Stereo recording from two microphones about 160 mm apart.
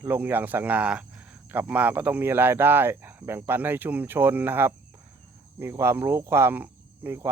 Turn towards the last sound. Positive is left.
turn(degrees=-15)  # may be behind; listen again after turning